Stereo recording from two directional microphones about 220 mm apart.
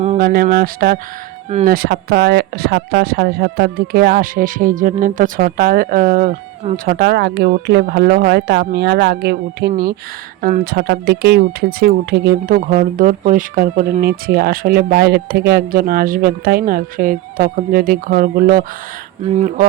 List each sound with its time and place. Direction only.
0.2 s speech: 40° right (ahead or behind)